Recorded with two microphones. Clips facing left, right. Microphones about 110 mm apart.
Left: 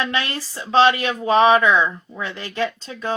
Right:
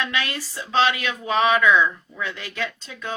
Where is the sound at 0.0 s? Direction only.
30° left (ahead or behind).